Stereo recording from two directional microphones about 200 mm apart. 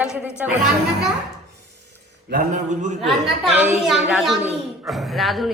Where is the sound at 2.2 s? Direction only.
45° right (ahead or behind).